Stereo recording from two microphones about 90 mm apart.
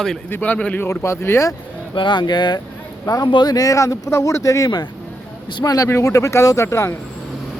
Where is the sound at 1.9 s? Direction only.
65° left (ahead or behind).